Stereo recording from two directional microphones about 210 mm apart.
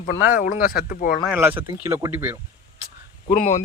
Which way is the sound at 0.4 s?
45° left (ahead or behind).